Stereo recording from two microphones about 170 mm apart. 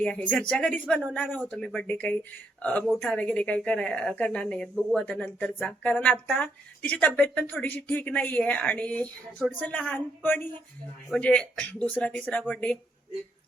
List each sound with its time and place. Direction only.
0.0 s a woman's voice: 10° left (ahead or behind)